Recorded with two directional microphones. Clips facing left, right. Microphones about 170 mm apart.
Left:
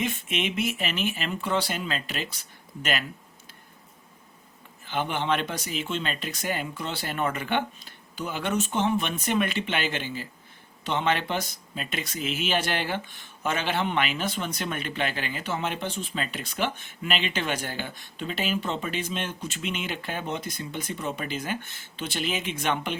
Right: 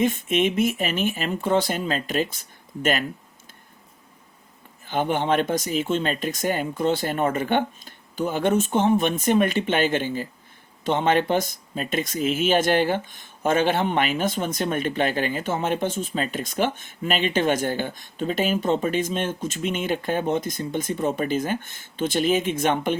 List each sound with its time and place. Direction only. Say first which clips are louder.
0.0 s speech: right 8 dB; 50° right (ahead or behind)
4.9 s speech: right 5 dB; 45° right (ahead or behind)